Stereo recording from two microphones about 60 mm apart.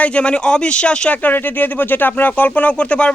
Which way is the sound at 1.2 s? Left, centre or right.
Left.